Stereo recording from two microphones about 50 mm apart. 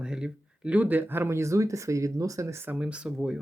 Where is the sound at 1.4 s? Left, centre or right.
Right.